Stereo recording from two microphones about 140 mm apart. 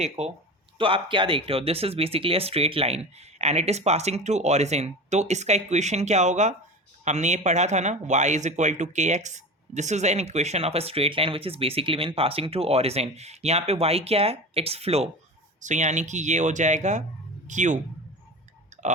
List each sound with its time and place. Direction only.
0.0 s speech: 50° right (ahead or behind)
0.8 s speech: 40° right (ahead or behind)
15.6 s speech: 60° right (ahead or behind)